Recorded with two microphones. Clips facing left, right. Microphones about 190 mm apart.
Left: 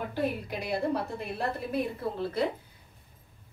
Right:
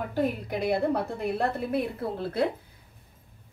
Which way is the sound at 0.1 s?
55° right (ahead or behind).